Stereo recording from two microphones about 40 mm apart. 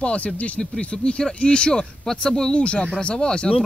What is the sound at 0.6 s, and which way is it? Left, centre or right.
Speech, centre.